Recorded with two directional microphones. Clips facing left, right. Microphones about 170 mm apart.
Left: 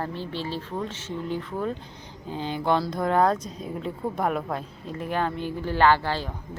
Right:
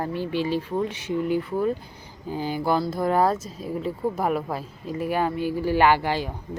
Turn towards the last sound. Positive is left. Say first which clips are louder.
# right 1 dB
turn(degrees=-15)  # may be behind; listen again after turning